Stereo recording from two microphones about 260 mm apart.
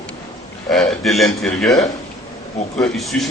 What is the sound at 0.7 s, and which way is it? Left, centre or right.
A man's voice, centre.